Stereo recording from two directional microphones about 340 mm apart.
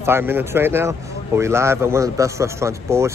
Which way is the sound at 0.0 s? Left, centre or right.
Centre.